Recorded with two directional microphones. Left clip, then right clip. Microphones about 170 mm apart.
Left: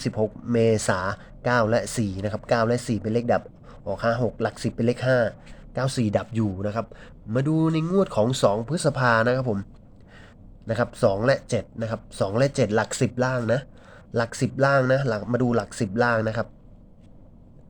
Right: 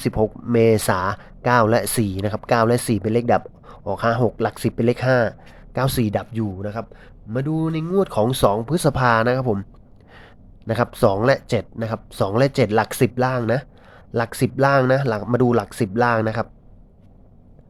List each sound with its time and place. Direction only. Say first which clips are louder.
0.0 s speech: right 5 dB; 20° right (ahead or behind)
6.1 s a man's voice: right 1 dB; 10° right (ahead or behind)
10.7 s a man's voice: right 4 dB; 20° right (ahead or behind)